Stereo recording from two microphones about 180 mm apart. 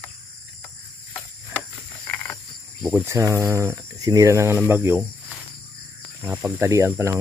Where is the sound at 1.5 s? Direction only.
10° left (ahead or behind).